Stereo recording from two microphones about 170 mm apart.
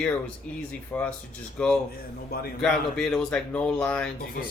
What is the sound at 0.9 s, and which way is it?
Speech, 10° left (ahead or behind).